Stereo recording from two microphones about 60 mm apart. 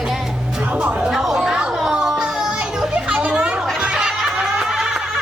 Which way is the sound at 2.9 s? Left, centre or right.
Centre.